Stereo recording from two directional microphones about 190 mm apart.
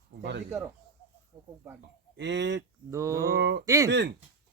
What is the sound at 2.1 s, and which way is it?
Speech, 65° right (ahead or behind).